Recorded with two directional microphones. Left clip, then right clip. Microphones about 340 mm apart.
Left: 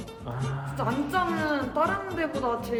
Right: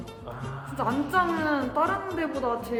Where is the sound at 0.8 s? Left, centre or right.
Centre.